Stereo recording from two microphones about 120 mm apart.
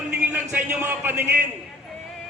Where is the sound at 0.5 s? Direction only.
15° right (ahead or behind).